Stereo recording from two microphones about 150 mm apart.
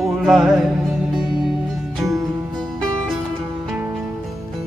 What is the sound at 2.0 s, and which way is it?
Music, 20° right (ahead or behind).